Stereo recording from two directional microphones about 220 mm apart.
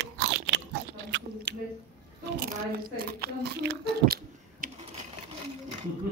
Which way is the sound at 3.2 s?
50° right (ahead or behind).